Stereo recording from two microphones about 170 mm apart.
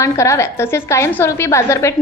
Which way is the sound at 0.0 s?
20° left (ahead or behind).